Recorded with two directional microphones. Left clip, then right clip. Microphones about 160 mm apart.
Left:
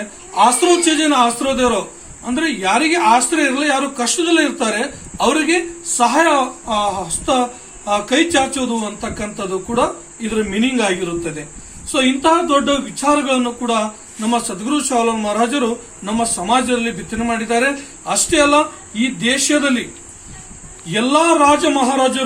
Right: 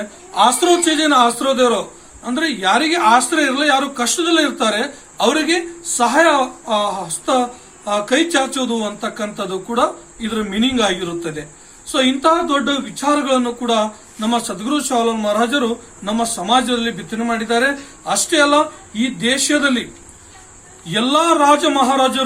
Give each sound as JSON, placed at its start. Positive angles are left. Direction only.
{"t": 0.6, "sound": "a woman's voice", "side_deg": -5}
{"t": 8.6, "sound": "speech", "side_deg": 0}
{"t": 20.9, "sound": "speech", "side_deg": 0}